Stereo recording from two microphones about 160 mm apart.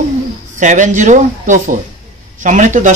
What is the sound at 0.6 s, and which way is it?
Speech, 50° right (ahead or behind).